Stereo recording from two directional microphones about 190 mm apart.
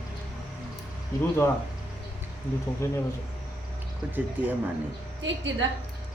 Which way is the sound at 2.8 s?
15° left (ahead or behind).